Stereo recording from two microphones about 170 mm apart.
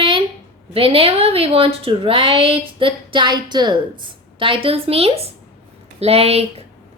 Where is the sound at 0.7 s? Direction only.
35° right (ahead or behind).